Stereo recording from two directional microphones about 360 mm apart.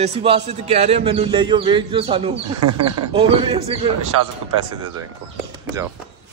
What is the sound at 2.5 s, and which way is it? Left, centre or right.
Speech, right.